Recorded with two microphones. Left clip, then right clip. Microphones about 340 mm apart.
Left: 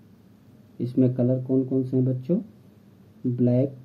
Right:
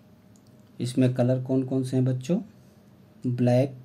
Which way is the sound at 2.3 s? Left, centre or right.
Right.